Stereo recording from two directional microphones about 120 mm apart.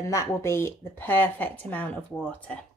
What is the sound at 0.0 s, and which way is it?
Speech, 25° left (ahead or behind).